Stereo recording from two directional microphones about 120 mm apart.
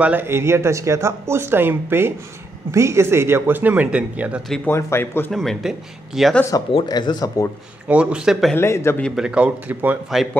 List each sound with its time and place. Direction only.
0.0 s speech: 15° right (ahead or behind)
4.6 s speech: 20° left (ahead or behind)
5.3 s speech: centre (ahead or behind)
6.5 s speech: 30° left (ahead or behind)
7.9 s speech: 10° right (ahead or behind)
8.5 s speech: 20° left (ahead or behind)
9.1 s speech: 5° right (ahead or behind)